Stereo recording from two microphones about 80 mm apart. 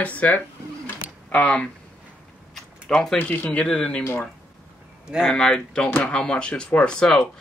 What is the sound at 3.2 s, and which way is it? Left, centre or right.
Speech, left.